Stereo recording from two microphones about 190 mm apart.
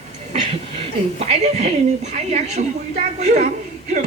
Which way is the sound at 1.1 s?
35° right (ahead or behind).